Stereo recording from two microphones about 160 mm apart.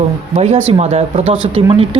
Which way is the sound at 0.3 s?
40° right (ahead or behind).